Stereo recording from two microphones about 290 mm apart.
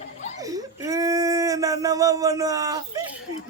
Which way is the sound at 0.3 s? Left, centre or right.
Centre.